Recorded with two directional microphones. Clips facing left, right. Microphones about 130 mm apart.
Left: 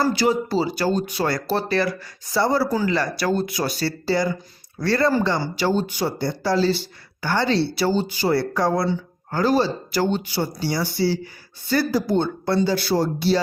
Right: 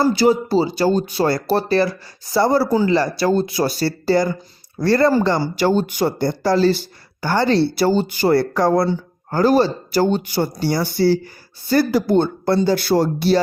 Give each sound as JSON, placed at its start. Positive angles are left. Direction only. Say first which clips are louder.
{"t": 0.0, "sound": "speech", "louder": "right 4 dB", "side_deg": -30}
{"t": 2.6, "sound": "speech", "louder": "right 5 dB", "side_deg": -25}
{"t": 11.9, "sound": "speech", "louder": "right 4 dB", "side_deg": -65}